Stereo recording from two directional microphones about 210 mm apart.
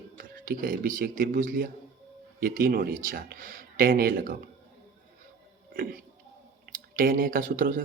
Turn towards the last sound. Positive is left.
turn(degrees=-40)  # may be behind; listen again after turning